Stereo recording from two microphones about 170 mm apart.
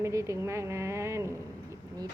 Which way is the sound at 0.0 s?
15° right (ahead or behind).